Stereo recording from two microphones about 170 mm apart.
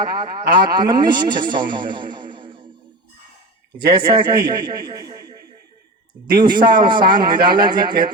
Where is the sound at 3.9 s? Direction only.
25° right (ahead or behind).